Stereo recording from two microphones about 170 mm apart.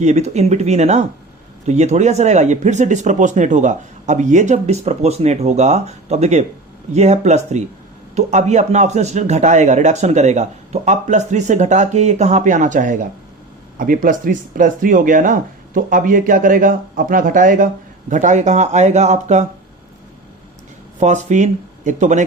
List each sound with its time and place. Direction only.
0.0 s speech: 40° right (ahead or behind)
21.0 s speech: 45° right (ahead or behind)